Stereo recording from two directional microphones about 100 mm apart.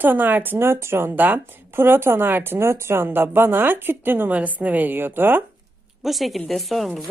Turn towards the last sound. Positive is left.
turn(degrees=0)  # may be behind; listen again after turning